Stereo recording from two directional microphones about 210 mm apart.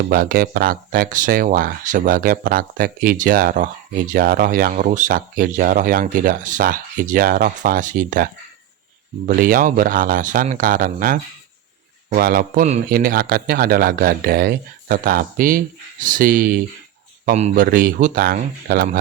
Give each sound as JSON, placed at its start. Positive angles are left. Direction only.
{"t": 0.1, "sound": "speech", "side_deg": -45}